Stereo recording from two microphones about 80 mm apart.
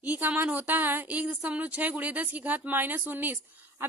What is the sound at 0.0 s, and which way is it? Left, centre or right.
A woman's voice, centre.